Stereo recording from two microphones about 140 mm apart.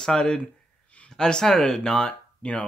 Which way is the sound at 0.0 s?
5° left (ahead or behind).